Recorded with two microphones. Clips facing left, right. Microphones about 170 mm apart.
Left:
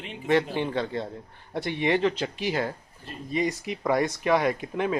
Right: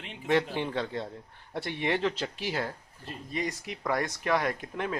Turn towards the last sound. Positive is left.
turn(degrees=15)  # may be behind; listen again after turning